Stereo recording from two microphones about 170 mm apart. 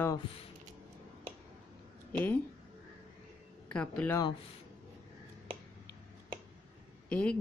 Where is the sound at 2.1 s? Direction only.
10° left (ahead or behind).